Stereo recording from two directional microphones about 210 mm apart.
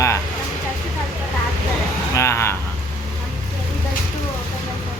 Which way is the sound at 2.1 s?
15° left (ahead or behind).